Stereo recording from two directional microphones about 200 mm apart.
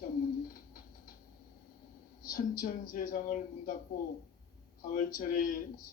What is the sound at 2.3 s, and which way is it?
A man's voice, 45° left (ahead or behind).